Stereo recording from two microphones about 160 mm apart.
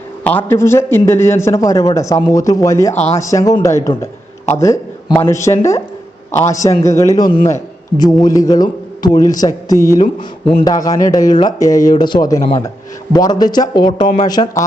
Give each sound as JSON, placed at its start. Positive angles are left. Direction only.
{"t": 0.3, "sound": "a man's voice", "side_deg": 15}
{"t": 2.9, "sound": "speech", "side_deg": 45}
{"t": 3.2, "sound": "a man's voice", "side_deg": 20}